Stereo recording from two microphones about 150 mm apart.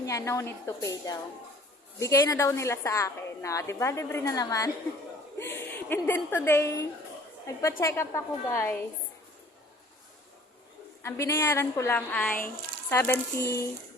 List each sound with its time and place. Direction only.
0.0 s a woman's voice: 20° left (ahead or behind)
11.0 s a woman's voice: 20° left (ahead or behind)